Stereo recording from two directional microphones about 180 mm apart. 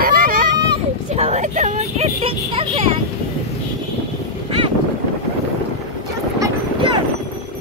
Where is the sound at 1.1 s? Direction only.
40° right (ahead or behind).